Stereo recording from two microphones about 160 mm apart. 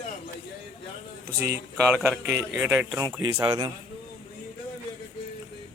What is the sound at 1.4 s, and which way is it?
Speech, 15° right (ahead or behind).